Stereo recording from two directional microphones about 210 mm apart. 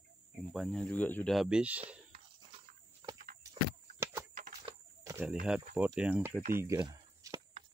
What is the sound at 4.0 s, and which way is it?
Horse, 15° right (ahead or behind).